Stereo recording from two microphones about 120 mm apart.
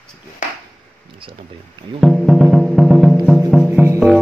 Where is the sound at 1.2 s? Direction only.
50° right (ahead or behind).